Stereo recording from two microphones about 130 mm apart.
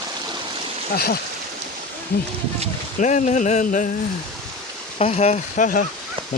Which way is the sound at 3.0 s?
70° left (ahead or behind).